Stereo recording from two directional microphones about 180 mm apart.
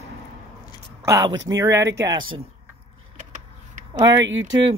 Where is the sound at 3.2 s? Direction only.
45° right (ahead or behind).